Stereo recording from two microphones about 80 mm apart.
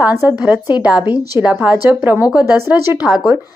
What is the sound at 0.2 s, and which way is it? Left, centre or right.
Speech, right.